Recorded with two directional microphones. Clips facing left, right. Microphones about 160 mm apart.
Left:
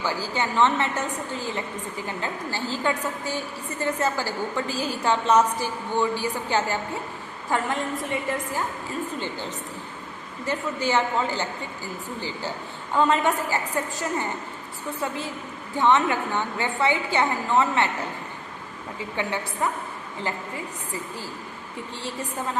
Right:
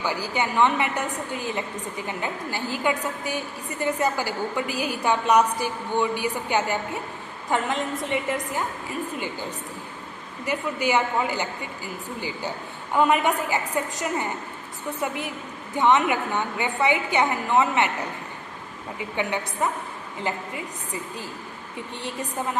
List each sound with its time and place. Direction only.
0.0 s a woman's voice: 15° right (ahead or behind)
10.4 s a woman's voice: 15° right (ahead or behind)
12.9 s a woman's voice: 15° right (ahead or behind)
18.9 s a woman's voice: 15° right (ahead or behind)